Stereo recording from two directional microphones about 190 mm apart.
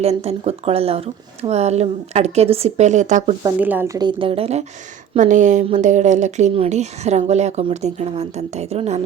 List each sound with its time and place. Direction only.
0.0 s speech: 35° right (ahead or behind)
3.6 s speech: 10° right (ahead or behind); by 9.0 s 35° right (ahead or behind)